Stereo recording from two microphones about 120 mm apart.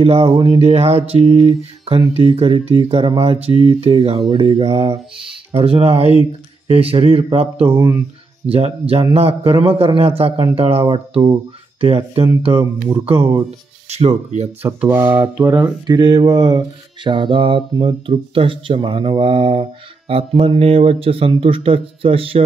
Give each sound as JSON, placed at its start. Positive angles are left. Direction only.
{"t": 0.0, "sound": "mantra", "side_deg": -55}
{"t": 11.8, "sound": "mantra", "side_deg": -55}
{"t": 14.8, "sound": "mantra", "side_deg": -15}